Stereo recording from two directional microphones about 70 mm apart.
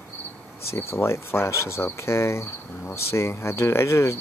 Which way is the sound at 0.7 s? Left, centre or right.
Left.